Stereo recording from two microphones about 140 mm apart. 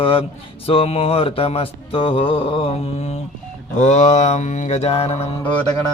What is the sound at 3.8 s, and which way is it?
Mantra, 60° left (ahead or behind).